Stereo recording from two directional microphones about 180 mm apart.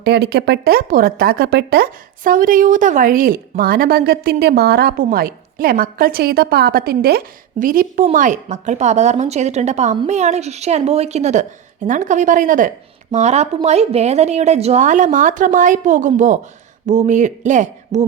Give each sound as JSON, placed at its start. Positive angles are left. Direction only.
{"t": 0.0, "sound": "a woman's voice", "side_deg": -65}